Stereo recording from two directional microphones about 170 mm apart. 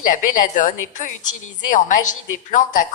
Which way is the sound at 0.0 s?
50° left (ahead or behind).